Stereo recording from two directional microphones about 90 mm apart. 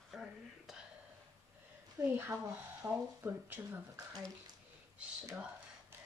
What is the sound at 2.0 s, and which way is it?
Speech, 35° right (ahead or behind).